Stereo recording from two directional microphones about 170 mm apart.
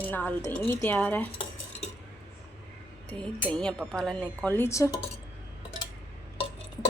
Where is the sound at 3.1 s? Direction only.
5° left (ahead or behind).